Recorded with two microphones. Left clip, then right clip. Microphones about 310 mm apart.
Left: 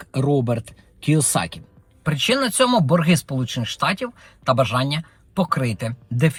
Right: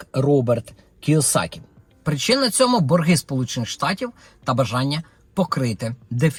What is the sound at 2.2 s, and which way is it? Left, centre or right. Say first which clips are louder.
Speech: right 1 dB; left.